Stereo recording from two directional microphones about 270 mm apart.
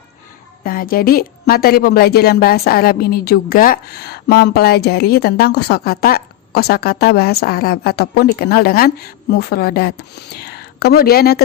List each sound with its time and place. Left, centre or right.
0.6 s a woman's voice: left